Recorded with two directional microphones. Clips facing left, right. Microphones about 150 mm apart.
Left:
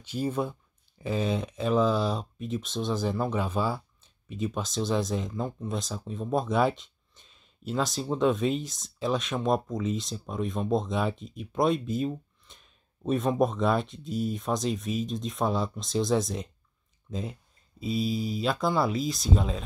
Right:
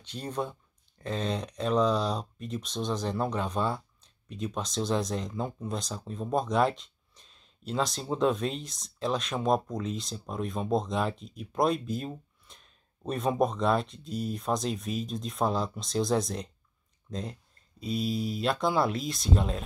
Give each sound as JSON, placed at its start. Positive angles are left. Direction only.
{"t": 0.0, "sound": "speech", "side_deg": 5}